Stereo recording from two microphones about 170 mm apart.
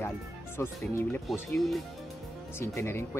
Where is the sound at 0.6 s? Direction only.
15° left (ahead or behind).